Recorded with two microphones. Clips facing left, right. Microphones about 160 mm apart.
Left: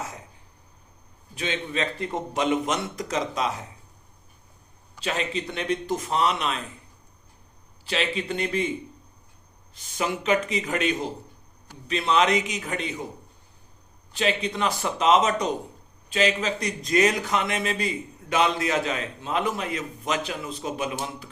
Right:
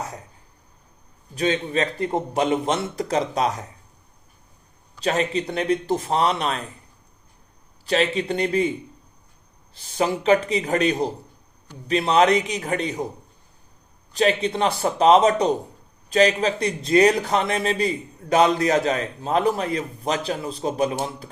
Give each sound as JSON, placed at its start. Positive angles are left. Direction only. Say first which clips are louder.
{"t": 1.4, "sound": "a man's voice", "louder": "right 6 dB", "side_deg": -40}
{"t": 4.9, "sound": "a man's voice", "louder": "right 6 dB", "side_deg": -40}
{"t": 7.9, "sound": "a man's voice", "louder": "right 6 dB", "side_deg": -40}
{"t": 9.7, "sound": "a man's voice", "louder": "right 5 dB", "side_deg": -35}
{"t": 14.1, "sound": "a man's voice", "louder": "right 5 dB", "side_deg": -40}